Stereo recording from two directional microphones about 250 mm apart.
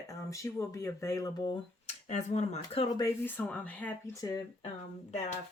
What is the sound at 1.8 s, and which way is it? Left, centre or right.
Speech, left.